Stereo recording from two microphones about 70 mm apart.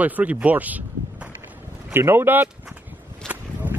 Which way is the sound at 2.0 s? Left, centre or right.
Right.